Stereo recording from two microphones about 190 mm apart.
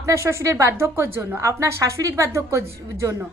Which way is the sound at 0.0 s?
15° right (ahead or behind).